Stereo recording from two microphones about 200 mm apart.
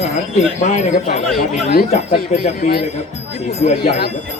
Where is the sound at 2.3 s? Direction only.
35° left (ahead or behind).